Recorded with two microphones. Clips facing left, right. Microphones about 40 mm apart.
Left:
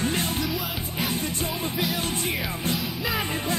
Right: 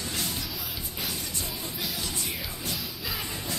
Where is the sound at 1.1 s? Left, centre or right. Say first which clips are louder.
Left 7 dB; left.